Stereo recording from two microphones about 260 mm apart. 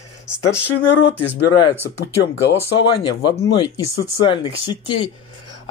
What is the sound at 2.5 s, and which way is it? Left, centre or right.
Speech, centre.